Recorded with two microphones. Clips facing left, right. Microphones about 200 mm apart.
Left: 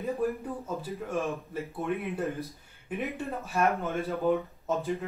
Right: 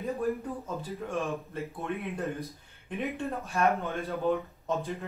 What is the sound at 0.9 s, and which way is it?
Speech, centre (ahead or behind).